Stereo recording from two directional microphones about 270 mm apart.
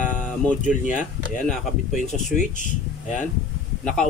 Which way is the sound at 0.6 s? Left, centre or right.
Left.